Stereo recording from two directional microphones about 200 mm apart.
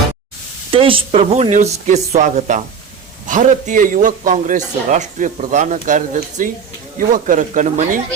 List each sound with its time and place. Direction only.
0.7 s a man's voice: 25° right (ahead or behind)